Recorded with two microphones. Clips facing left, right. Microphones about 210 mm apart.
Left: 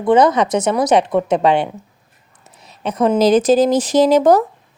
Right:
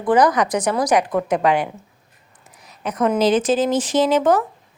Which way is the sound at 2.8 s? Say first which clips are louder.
Left 4 dB; 30° left (ahead or behind).